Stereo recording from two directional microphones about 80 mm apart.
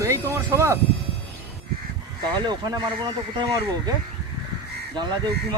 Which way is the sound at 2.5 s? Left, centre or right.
Right.